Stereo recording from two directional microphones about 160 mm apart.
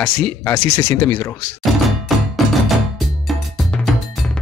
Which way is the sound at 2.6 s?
Centre (ahead or behind).